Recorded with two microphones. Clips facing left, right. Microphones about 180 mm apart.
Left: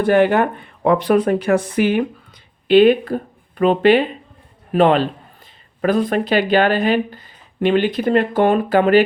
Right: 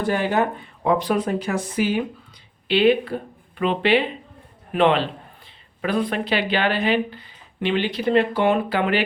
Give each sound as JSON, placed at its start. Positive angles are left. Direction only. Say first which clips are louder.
{"t": 0.0, "sound": "speech", "louder": "left 7 dB", "side_deg": 60}
{"t": 2.6, "sound": "speech", "louder": "left 6 dB", "side_deg": 50}